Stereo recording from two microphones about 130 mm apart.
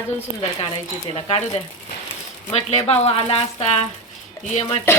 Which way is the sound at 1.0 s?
50° left (ahead or behind).